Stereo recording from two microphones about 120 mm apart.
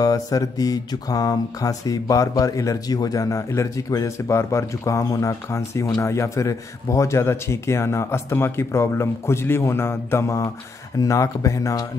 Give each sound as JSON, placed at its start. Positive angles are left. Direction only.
{"t": 0.0, "sound": "mantra", "side_deg": 30}